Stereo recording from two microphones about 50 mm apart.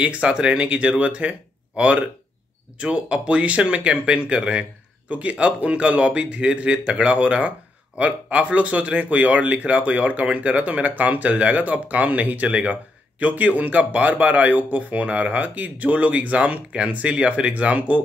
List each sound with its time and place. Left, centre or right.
0.0 s speech: right